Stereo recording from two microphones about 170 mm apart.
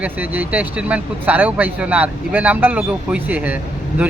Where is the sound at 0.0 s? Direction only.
10° right (ahead or behind).